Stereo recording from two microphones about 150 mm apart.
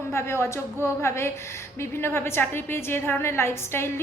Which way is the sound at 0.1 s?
15° left (ahead or behind).